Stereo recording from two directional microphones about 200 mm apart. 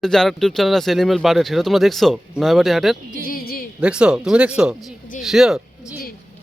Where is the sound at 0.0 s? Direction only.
Centre (ahead or behind).